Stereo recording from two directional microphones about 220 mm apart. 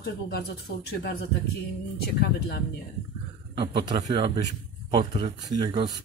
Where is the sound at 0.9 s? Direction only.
45° left (ahead or behind).